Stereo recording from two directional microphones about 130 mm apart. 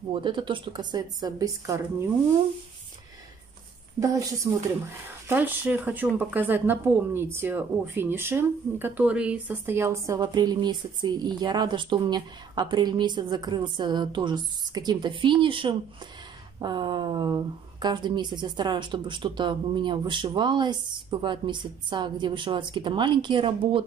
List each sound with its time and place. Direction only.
0.1 s speech: 35° right (ahead or behind)
4.0 s a woman's voice: 25° right (ahead or behind)
5.3 s speech: 15° right (ahead or behind); by 23.8 s 40° right (ahead or behind)